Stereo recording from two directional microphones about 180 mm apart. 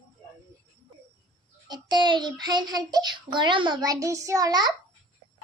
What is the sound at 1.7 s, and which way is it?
A child's voice, 20° right (ahead or behind).